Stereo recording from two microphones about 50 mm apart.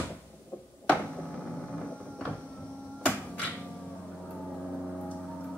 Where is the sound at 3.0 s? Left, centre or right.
Left.